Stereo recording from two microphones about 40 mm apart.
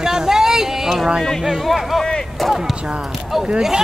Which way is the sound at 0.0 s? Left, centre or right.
Centre.